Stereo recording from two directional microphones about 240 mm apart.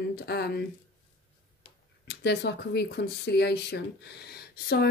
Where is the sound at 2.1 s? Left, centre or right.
Left.